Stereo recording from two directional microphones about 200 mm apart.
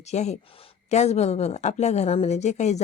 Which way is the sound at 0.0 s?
35° left (ahead or behind).